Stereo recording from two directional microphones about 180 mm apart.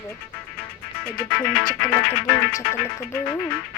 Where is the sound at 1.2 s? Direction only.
5° left (ahead or behind).